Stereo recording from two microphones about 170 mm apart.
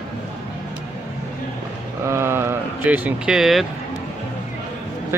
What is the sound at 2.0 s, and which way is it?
Speech, 15° right (ahead or behind).